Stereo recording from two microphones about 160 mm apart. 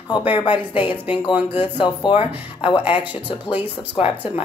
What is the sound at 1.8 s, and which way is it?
Speech, 30° left (ahead or behind).